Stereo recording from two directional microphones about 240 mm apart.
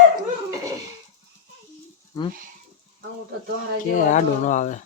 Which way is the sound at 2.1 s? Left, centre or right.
Centre.